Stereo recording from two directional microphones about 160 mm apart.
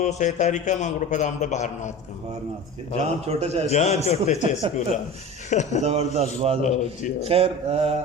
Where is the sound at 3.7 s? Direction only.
45° left (ahead or behind).